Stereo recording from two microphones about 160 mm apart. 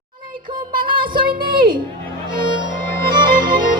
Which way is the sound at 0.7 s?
30° right (ahead or behind).